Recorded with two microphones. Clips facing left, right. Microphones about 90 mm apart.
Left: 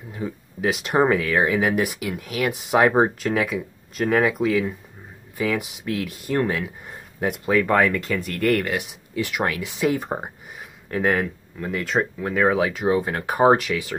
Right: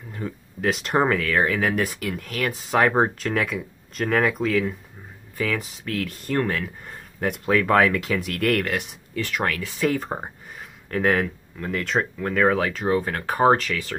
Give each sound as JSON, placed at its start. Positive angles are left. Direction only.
{"t": 0.1, "sound": "speech", "side_deg": 5}